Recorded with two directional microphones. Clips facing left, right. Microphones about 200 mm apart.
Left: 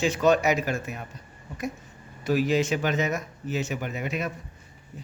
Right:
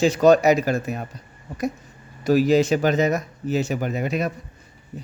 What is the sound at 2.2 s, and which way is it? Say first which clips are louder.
Speech: right 6 dB; 40° right (ahead or behind).